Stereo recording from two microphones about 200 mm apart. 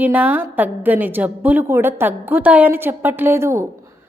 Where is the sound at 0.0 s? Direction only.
10° right (ahead or behind).